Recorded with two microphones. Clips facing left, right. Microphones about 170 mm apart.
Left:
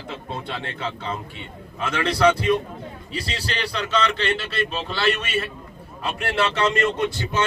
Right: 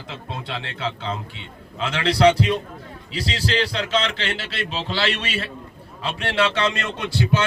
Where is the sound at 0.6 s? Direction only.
90° right.